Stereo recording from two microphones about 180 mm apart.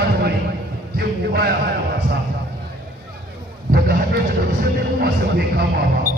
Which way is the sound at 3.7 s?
60° right (ahead or behind).